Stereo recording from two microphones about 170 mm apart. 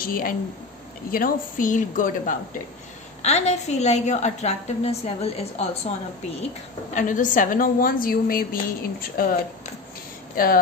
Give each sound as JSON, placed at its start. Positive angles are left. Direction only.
{"t": 0.0, "sound": "a woman's voice", "side_deg": 55}
{"t": 3.2, "sound": "a woman's voice", "side_deg": 40}
{"t": 6.9, "sound": "a woman's voice", "side_deg": 50}